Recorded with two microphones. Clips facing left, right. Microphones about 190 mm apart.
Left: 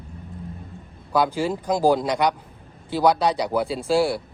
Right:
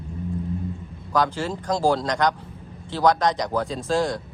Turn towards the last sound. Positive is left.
turn(degrees=10)  # may be behind; listen again after turning